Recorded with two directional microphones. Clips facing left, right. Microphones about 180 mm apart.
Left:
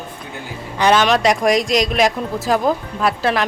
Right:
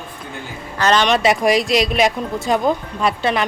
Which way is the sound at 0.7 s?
10° left (ahead or behind).